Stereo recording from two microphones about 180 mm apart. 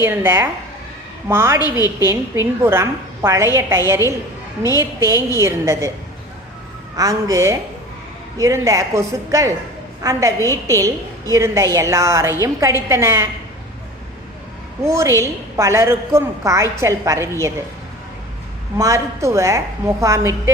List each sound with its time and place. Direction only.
0.0 s a woman's voice: 10° right (ahead or behind)
1.6 s a woman's voice: 20° left (ahead or behind)
2.0 s a woman's voice: 15° right (ahead or behind)
6.9 s a woman's voice: 20° right (ahead or behind)
14.8 s a woman's voice: 15° right (ahead or behind)
18.8 s a woman's voice: 15° right (ahead or behind)